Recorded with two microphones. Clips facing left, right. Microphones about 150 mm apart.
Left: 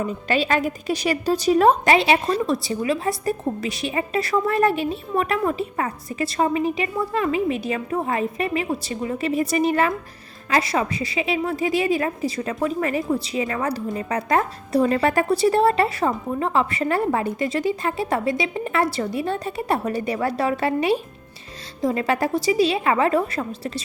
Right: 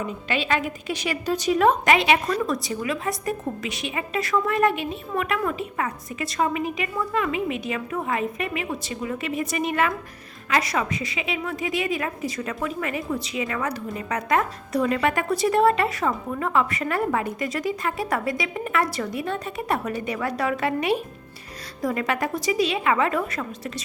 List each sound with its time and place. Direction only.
0.3 s a woman's voice: 40° left (ahead or behind)